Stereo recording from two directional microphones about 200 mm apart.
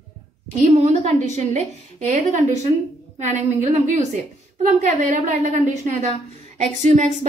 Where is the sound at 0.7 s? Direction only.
35° right (ahead or behind).